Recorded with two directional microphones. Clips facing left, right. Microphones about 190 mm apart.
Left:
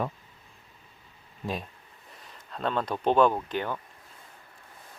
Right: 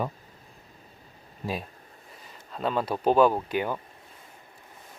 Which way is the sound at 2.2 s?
5° right (ahead or behind).